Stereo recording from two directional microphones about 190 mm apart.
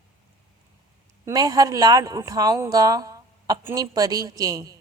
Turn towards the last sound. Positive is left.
turn(degrees=-20)  # may be behind; listen again after turning